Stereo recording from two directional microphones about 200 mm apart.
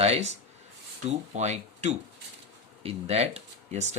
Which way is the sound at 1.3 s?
35° right (ahead or behind).